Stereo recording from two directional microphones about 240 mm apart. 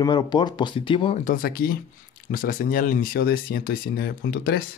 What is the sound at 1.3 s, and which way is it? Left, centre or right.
Speech, left.